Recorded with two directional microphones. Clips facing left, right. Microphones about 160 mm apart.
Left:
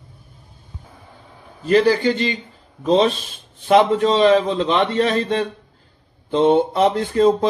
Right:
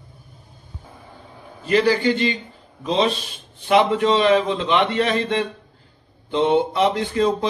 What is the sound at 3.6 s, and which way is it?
A man's voice, 35° left (ahead or behind).